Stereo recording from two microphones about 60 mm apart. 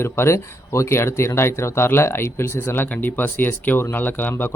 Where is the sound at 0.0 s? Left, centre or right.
Left.